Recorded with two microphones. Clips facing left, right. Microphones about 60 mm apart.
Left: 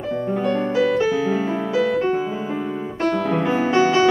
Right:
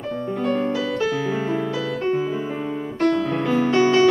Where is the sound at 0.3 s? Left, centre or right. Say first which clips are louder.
Even; centre.